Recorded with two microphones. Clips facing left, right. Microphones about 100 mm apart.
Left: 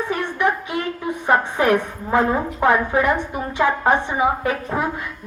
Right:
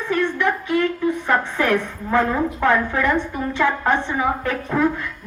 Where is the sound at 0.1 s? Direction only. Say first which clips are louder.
Right 4 dB; 15° left (ahead or behind).